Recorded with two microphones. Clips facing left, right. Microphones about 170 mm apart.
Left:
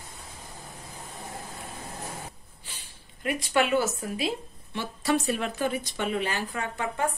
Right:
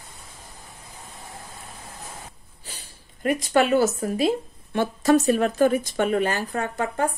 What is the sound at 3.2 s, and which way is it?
Speech, 40° right (ahead or behind).